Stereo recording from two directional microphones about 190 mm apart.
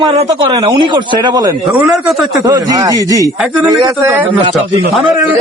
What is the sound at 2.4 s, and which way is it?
A man's voice, 20° right (ahead or behind).